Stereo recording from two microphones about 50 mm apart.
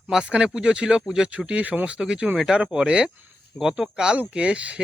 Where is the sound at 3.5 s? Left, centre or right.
Right.